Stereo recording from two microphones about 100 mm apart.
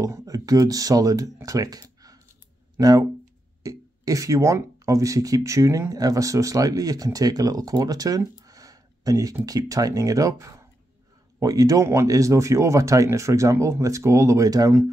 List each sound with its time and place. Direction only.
0.0 s speech: 35° right (ahead or behind)